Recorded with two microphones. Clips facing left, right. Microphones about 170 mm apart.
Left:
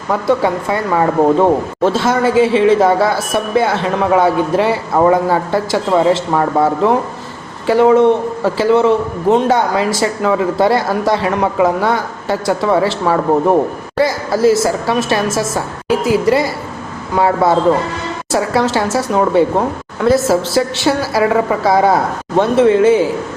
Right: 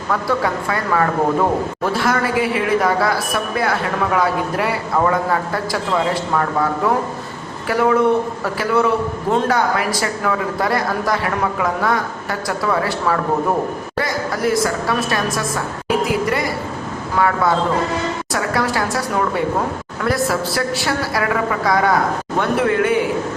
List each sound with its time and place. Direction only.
0.1 s speech: 25° left (ahead or behind)